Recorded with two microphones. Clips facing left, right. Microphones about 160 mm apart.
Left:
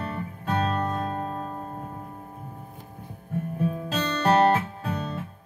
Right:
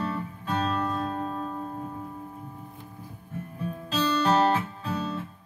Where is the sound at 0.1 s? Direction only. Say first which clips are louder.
Left 1 dB; 50° left (ahead or behind).